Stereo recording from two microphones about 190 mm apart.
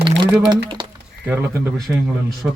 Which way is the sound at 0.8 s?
25° right (ahead or behind).